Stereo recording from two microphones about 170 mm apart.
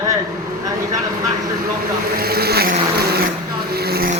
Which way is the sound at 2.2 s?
65° right (ahead or behind).